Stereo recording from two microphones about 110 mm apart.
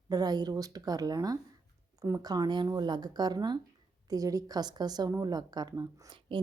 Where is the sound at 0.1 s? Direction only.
35° right (ahead or behind).